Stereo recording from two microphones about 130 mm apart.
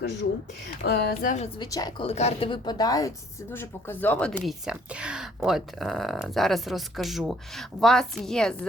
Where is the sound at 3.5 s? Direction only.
15° left (ahead or behind).